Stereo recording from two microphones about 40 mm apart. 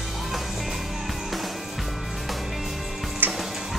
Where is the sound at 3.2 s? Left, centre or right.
Right.